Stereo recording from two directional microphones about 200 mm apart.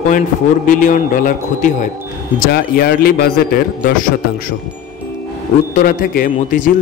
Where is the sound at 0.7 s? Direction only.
40° left (ahead or behind).